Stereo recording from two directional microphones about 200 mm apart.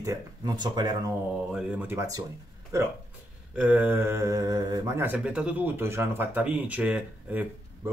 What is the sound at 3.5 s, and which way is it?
Speech, 5° right (ahead or behind).